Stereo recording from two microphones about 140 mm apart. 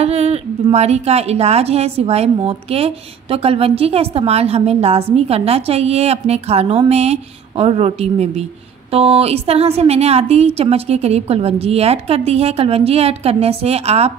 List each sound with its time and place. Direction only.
0.0 s a woman's voice: 50° right (ahead or behind)